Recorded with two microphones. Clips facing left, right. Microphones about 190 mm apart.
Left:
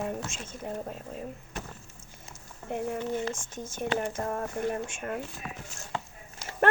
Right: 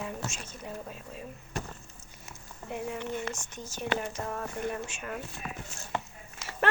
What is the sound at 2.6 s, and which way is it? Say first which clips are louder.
Speech: left 4 dB; 50° left (ahead or behind).